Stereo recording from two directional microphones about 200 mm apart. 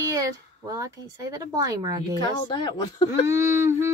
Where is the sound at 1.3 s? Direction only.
20° right (ahead or behind).